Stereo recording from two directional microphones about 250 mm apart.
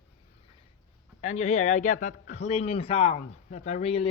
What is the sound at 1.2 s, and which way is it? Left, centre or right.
Speech, left.